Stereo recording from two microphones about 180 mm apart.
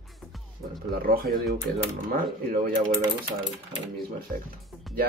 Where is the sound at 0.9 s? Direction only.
55° right (ahead or behind).